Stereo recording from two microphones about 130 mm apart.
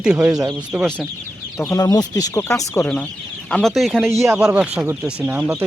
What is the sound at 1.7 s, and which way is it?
Speech, 30° left (ahead or behind).